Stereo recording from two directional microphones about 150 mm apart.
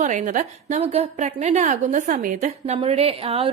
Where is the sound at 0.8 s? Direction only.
45° right (ahead or behind).